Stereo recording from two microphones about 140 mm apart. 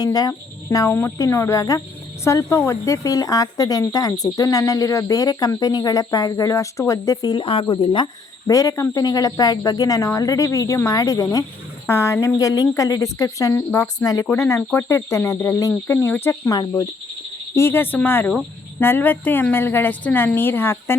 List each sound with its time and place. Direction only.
0.0 s speech: 25° left (ahead or behind)
7.4 s speech: 40° left (ahead or behind)
8.4 s speech: 25° left (ahead or behind)
14.0 s a woman's voice: 25° left (ahead or behind)
16.5 s a woman's voice: 25° left (ahead or behind)